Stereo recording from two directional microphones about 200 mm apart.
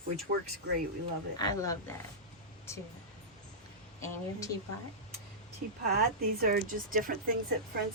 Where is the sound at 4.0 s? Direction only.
15° left (ahead or behind).